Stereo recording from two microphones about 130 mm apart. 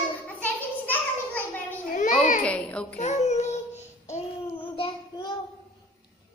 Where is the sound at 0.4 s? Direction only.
15° left (ahead or behind).